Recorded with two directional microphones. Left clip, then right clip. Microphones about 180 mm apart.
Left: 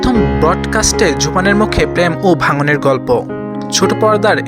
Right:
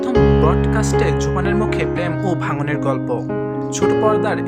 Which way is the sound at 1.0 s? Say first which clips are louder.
Left 7 dB; 30° left (ahead or behind).